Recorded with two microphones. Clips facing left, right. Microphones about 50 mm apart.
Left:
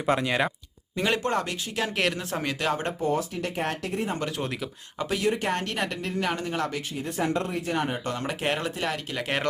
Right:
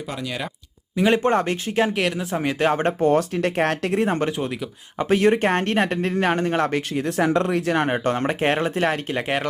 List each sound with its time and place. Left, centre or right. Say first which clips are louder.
0.2 s speech: left 4 dB; left
0.9 s speech: right 7 dB; centre
1.2 s speech: right 7 dB; right
1.9 s speech: right 4 dB; centre
2.6 s speech: right 10 dB; right
3.1 s speech: right 8 dB; right
4.4 s speech: right 4 dB; centre
4.9 s speech: right 8 dB; right
7.8 s speech: right 7 dB; right